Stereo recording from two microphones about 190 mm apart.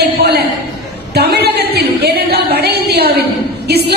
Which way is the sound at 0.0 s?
60° right (ahead or behind).